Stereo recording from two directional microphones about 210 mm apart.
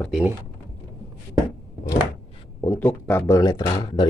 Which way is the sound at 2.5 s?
10° left (ahead or behind).